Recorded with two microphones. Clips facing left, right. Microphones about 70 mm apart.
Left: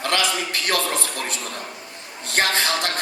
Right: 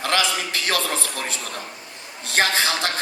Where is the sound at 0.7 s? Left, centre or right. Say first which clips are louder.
Left 1 dB; centre.